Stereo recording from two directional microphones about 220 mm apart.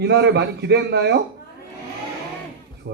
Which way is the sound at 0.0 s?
50° right (ahead or behind).